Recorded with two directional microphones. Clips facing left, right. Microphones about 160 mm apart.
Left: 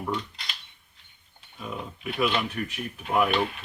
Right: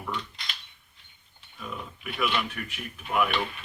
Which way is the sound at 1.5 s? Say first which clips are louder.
Left 3 dB; 30° left (ahead or behind).